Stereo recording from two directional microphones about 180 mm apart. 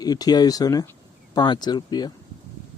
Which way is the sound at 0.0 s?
20° left (ahead or behind).